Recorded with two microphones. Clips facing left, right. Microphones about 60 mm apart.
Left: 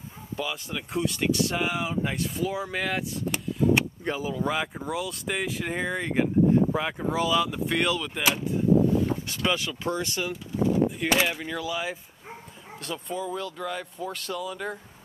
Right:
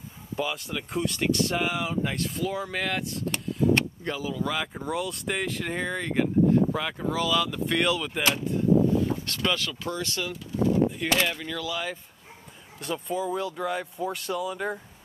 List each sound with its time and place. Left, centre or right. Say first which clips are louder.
0.4 s speech: right 2 dB; centre
4.0 s speech: left 2 dB; left
4.7 s speech: right 1 dB; centre
8.2 s a sound: even; centre
9.8 s speech: left 3 dB; left
10.9 s speech: left 1 dB; centre
12.8 s speech: right 3 dB; centre